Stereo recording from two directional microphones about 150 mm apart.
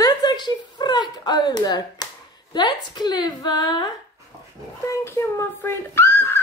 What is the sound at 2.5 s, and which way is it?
Speech, 30° left (ahead or behind).